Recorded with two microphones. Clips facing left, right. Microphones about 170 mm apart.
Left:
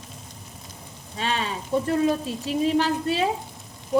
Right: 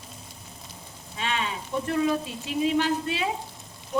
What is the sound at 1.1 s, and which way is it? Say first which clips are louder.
Speech: left 3 dB; 40° left (ahead or behind).